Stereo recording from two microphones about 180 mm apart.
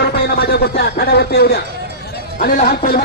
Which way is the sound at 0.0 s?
65° left (ahead or behind).